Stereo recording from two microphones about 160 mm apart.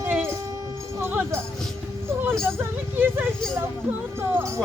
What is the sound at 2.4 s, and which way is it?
Speech, 15° right (ahead or behind).